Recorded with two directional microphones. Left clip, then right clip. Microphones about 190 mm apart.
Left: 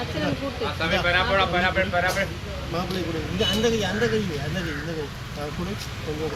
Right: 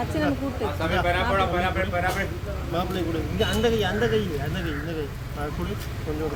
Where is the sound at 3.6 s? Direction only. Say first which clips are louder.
Right 3 dB; centre (ahead or behind).